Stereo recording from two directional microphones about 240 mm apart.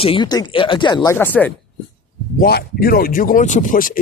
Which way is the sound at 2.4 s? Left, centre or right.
Left.